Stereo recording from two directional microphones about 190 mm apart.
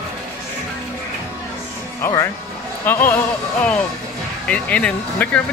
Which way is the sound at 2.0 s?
15° left (ahead or behind).